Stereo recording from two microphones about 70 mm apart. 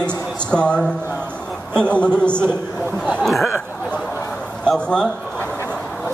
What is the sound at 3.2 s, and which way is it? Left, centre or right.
Speech, centre.